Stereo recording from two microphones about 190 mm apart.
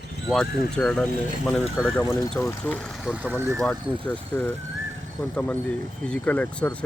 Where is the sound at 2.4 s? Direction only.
10° left (ahead or behind).